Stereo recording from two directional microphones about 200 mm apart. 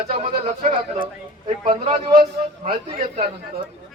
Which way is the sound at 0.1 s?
35° right (ahead or behind).